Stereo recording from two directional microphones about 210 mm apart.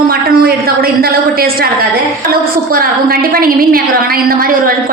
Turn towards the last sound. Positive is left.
turn(degrees=-45)  # may be behind; listen again after turning